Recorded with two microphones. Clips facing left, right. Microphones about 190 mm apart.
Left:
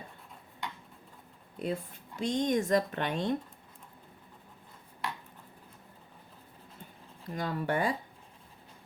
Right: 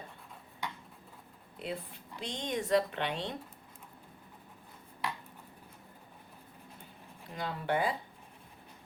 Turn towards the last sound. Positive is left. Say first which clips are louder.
# left 2 dB
turn(degrees=45)  # may be behind; listen again after turning